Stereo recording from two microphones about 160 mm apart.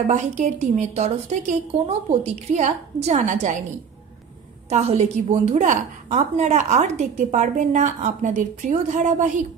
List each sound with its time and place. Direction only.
0.0 s a woman's voice: 45° right (ahead or behind)
4.6 s a woman's voice: 40° right (ahead or behind)